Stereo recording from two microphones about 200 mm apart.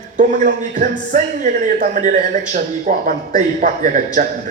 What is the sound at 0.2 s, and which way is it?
A man's voice, 40° right (ahead or behind).